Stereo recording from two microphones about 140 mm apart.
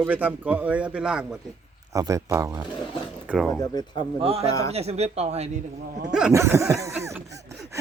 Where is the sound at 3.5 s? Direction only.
30° left (ahead or behind).